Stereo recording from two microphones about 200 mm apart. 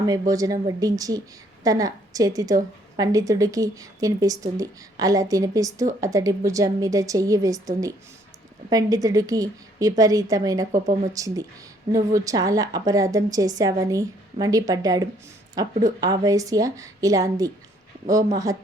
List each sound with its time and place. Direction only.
0.0 s a woman's voice: 20° right (ahead or behind)